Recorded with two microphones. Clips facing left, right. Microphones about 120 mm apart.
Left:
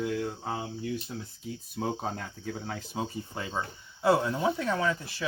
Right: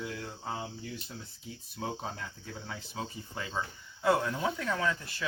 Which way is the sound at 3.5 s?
30° left (ahead or behind).